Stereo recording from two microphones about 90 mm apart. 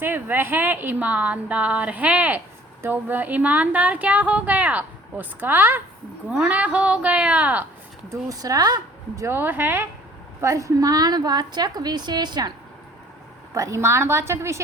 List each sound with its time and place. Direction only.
0.0 s a woman's voice: 25° right (ahead or behind)
6.2 s a woman's voice: 10° right (ahead or behind)
8.1 s a woman's voice: 40° right (ahead or behind)
9.2 s speech: 20° right (ahead or behind)
10.4 s a woman's voice: 35° right (ahead or behind); by 12.5 s 50° right (ahead or behind)
13.5 s a woman's voice: 35° right (ahead or behind)